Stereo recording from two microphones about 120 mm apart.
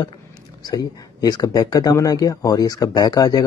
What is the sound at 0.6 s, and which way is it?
Speech, 35° left (ahead or behind).